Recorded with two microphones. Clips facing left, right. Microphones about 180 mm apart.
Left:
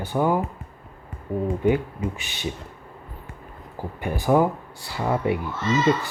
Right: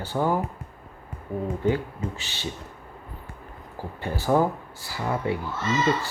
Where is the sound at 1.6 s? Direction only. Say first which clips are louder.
Left 3 dB; 15° left (ahead or behind).